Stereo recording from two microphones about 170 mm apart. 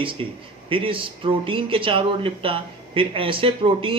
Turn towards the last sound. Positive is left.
turn(degrees=-30)  # may be behind; listen again after turning